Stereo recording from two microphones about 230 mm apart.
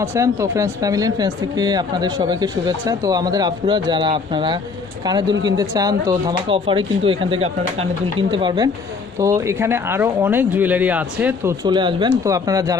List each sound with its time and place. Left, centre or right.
0.0 s speech: centre
11.6 s speech: centre